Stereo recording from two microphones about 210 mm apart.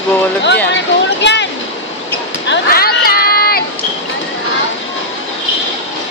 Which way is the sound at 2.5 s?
45° left (ahead or behind).